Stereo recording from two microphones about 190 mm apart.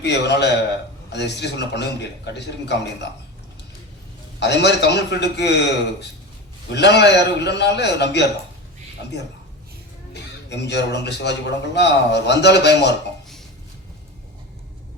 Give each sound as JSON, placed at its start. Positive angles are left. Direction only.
{"t": 0.0, "sound": "a man's voice", "side_deg": 65}
{"t": 4.4, "sound": "a man's voice", "side_deg": 65}
{"t": 10.5, "sound": "a man's voice", "side_deg": 65}